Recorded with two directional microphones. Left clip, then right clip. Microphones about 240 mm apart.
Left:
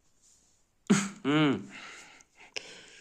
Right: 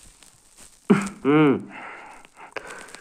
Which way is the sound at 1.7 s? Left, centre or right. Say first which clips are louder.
Right 8 dB; centre.